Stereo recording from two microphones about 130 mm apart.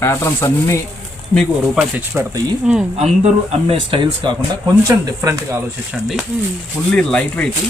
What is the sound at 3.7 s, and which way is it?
Speech, 40° right (ahead or behind).